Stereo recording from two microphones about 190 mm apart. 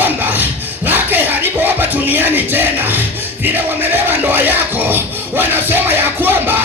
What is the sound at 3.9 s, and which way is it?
Music, 10° right (ahead or behind).